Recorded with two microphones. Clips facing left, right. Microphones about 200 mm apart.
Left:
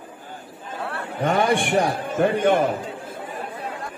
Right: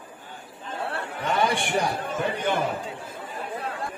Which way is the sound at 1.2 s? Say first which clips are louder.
Left 5 dB; 55° left (ahead or behind).